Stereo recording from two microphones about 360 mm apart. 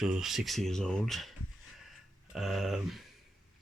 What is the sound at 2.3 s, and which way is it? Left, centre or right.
Speech, centre.